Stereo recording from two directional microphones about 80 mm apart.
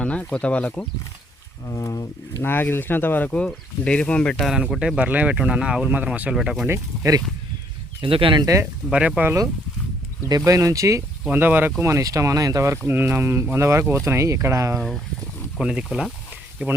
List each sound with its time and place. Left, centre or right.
0.0 s speech: centre
1.6 s speech: left
2.4 s speech: left
4.4 s speech: centre
4.9 s speech: centre
6.7 s speech: right
8.0 s speech: right
8.9 s speech: centre
10.2 s speech: right
11.3 s speech: right
11.8 s speech: right
12.9 s speech: right
14.8 s speech: centre
15.5 s speech: centre